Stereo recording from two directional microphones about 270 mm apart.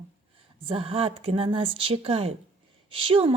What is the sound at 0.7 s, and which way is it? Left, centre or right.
Speech, right.